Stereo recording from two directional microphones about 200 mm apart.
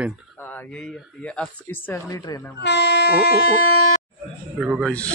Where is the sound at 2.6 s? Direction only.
55° left (ahead or behind).